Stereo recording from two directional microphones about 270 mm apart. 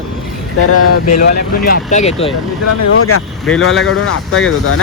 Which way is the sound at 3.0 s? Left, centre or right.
Left.